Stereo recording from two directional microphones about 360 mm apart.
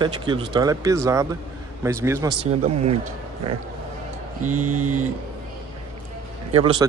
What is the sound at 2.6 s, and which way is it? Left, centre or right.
Speech, centre.